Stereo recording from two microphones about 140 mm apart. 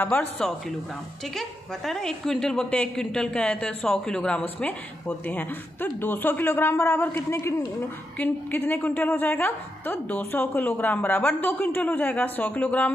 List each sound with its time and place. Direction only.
0.0 s a woman's voice: 10° left (ahead or behind)